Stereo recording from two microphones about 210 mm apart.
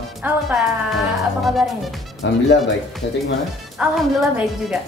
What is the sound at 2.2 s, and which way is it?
Speech, 60° left (ahead or behind).